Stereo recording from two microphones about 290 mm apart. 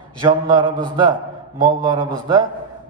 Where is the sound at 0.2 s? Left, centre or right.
Centre.